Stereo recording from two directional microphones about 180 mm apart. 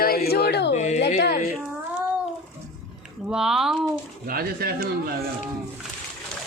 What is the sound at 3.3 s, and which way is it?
Speech, 5° right (ahead or behind).